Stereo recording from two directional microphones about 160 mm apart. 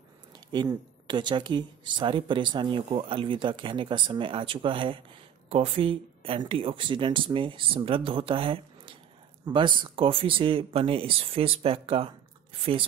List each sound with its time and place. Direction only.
0.5 s speech: 30° right (ahead or behind)